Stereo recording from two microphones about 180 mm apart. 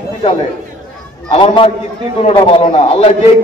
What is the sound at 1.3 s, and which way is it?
A man's voice, 30° left (ahead or behind).